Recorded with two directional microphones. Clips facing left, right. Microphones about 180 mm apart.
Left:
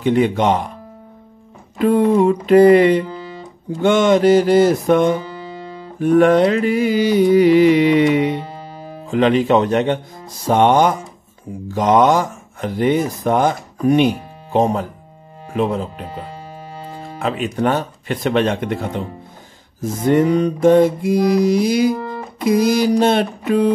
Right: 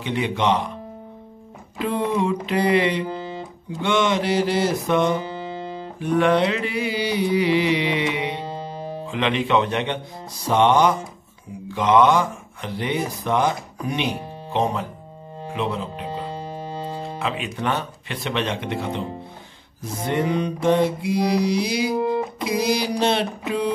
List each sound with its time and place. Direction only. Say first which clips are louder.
0.0 s speech: left 7 dB; 45° left (ahead or behind)
1.8 s speech: left 9 dB; 50° left (ahead or behind)
3.1 s music: right 1 dB; 25° right (ahead or behind)
3.8 s speech: left 8 dB; 45° left (ahead or behind)
5.2 s music: right 1 dB; 25° right (ahead or behind)
5.9 s speech: left 7 dB; 50° left (ahead or behind)
8.5 s music: right 3 dB; 30° right (ahead or behind)
9.1 s speech: left 7 dB; 40° left (ahead or behind)
16.1 s music: right 2 dB; 30° right (ahead or behind)
17.2 s speech: left 9 dB; 45° left (ahead or behind)
21.9 s music: right 5 dB; 15° right (ahead or behind)
22.4 s speech: left 12 dB; 50° left (ahead or behind)